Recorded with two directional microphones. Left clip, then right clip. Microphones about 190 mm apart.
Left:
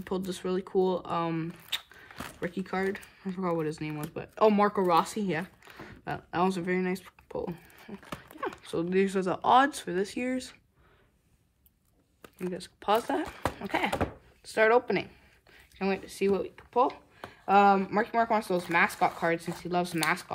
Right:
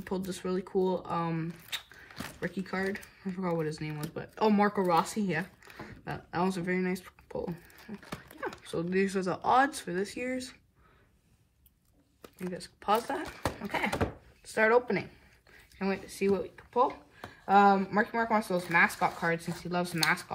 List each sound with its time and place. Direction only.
0.1 s speech: 35° left (ahead or behind)
2.9 s speech: 50° left (ahead or behind)
3.3 s speech: 35° left (ahead or behind)
5.9 s speech: 45° left (ahead or behind)
12.8 s speech: 50° left (ahead or behind)